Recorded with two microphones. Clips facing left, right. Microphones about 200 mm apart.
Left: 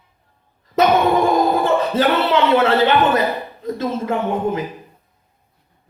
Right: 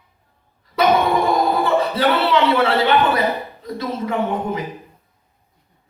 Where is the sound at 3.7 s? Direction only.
45° left (ahead or behind).